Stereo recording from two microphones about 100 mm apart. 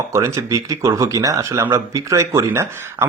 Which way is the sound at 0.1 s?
30° right (ahead or behind).